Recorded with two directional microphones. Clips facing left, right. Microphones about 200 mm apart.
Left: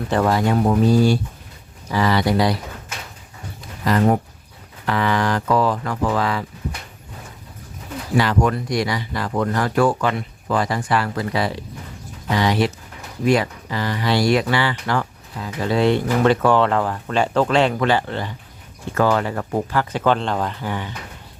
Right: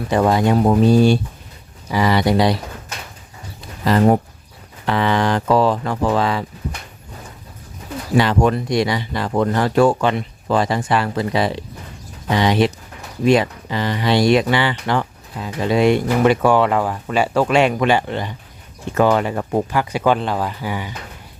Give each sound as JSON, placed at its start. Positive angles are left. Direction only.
{"t": 0.1, "sound": "speech", "side_deg": -15}
{"t": 3.8, "sound": "speech", "side_deg": -30}
{"t": 8.1, "sound": "speech", "side_deg": -25}